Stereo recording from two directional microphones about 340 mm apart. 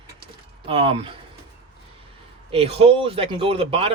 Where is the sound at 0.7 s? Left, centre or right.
Centre.